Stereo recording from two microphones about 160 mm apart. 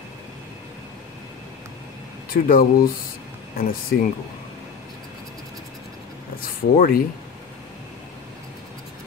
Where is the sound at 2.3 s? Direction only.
60° left (ahead or behind).